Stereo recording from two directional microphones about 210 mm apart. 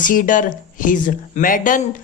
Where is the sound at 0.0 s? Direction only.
40° left (ahead or behind).